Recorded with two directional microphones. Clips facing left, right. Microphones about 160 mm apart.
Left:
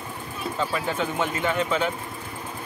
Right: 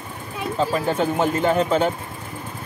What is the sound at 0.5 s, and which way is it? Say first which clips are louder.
Speech: right 6 dB; 40° right (ahead or behind).